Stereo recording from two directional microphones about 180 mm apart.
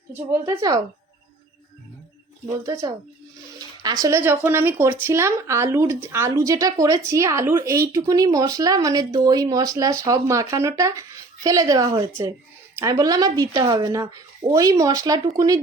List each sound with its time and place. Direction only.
0.1 s speech: 15° right (ahead or behind)
2.5 s speech: 15° right (ahead or behind)
4.0 s a woman's voice: 15° right (ahead or behind)